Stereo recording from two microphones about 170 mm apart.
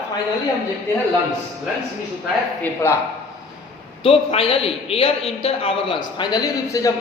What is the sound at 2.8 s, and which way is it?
Speech, 15° left (ahead or behind).